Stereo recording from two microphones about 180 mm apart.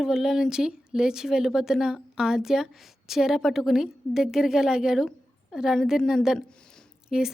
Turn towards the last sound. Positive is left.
turn(degrees=-5)  # may be behind; listen again after turning